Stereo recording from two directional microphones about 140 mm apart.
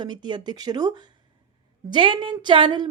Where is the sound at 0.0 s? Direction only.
30° right (ahead or behind).